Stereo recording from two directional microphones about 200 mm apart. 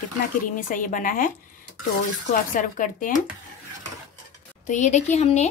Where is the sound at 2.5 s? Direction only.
40° left (ahead or behind).